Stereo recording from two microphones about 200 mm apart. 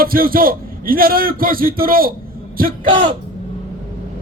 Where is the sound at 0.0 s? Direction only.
45° right (ahead or behind).